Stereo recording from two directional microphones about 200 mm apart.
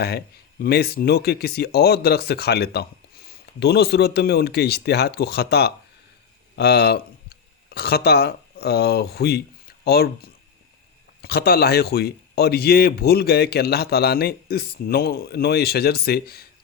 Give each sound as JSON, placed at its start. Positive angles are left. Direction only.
{"t": 0.6, "sound": "speech", "side_deg": 50}